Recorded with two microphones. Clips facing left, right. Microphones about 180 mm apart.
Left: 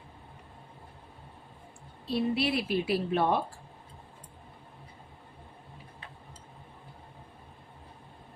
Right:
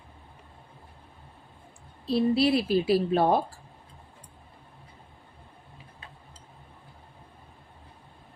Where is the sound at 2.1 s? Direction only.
35° right (ahead or behind).